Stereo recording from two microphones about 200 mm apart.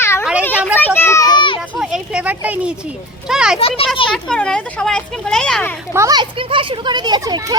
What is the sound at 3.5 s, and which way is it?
Speech, 30° left (ahead or behind).